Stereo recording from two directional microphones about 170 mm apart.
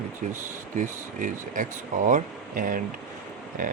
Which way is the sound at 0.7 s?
50° right (ahead or behind).